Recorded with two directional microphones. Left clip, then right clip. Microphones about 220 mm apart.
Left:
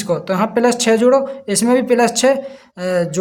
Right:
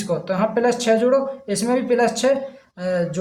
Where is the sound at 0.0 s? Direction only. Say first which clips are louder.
Left 4 dB; 35° left (ahead or behind).